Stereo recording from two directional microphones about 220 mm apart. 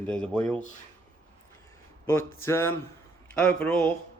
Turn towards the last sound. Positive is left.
turn(degrees=5)  # may be behind; listen again after turning